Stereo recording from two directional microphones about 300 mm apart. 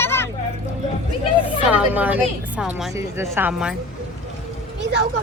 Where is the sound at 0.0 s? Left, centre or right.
Centre.